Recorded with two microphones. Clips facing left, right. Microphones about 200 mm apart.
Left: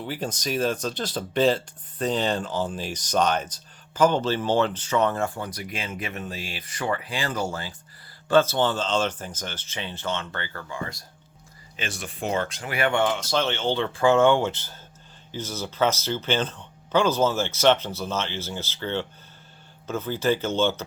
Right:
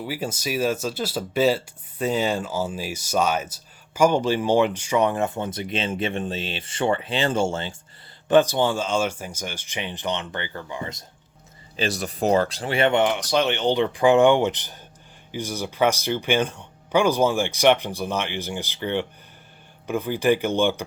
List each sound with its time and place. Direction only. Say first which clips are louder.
0.0 s speech: right 1 dB; 10° right (ahead or behind); by 7.8 s 25° right (ahead or behind)
8.3 s speech: right 2 dB; 15° right (ahead or behind)
11.8 s speech: right 7 dB; 35° right (ahead or behind); by 20.8 s 15° right (ahead or behind)